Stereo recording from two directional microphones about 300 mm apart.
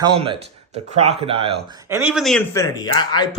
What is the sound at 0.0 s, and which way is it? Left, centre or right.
Speech, centre.